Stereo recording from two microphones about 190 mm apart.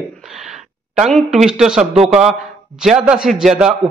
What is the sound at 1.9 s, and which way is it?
Speech, 30° right (ahead or behind).